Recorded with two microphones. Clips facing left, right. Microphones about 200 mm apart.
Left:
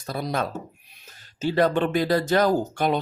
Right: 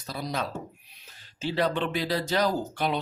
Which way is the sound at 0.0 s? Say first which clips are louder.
Left 5 dB; 50° left (ahead or behind).